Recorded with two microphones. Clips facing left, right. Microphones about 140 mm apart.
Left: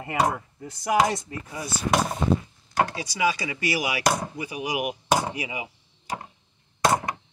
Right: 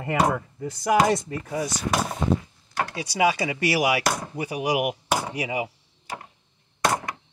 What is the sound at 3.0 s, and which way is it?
Speech, 60° right (ahead or behind).